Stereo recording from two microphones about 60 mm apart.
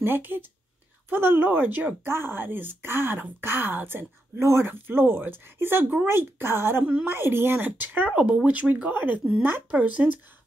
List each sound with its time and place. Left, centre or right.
0.0 s speech: right
4.4 s speech: right
6.8 s speech: centre
7.1 s speech: right
8.1 s speech: right
8.9 s speech: right